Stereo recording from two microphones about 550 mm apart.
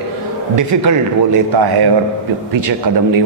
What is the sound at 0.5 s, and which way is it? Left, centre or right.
A man's voice, right.